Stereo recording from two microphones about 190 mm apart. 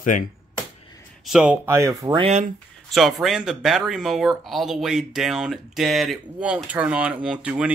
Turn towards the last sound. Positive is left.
turn(degrees=-5)  # may be behind; listen again after turning